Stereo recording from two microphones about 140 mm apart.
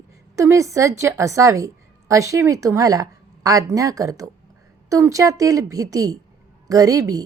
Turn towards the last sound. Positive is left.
turn(degrees=-25)  # may be behind; listen again after turning